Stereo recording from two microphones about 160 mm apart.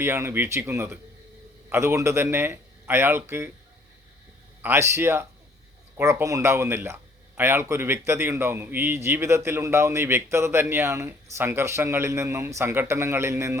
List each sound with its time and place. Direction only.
0.0 s a man's voice: 15° right (ahead or behind)
4.6 s a man's voice: 15° right (ahead or behind)